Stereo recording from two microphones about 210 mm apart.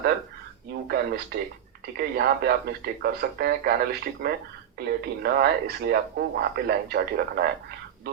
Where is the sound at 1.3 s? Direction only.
50° right (ahead or behind).